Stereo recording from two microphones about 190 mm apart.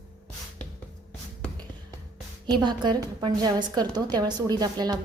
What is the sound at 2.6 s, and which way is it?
A woman's voice, 25° right (ahead or behind).